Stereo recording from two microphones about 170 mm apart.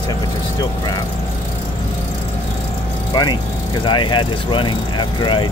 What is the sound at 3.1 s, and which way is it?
Speech, 25° left (ahead or behind).